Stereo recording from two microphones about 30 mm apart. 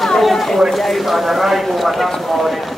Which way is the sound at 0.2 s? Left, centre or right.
Centre.